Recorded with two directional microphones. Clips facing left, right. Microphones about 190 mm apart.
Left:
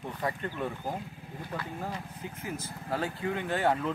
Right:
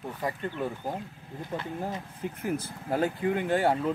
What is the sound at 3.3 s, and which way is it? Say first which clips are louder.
Speech: right 1 dB; 20° right (ahead or behind).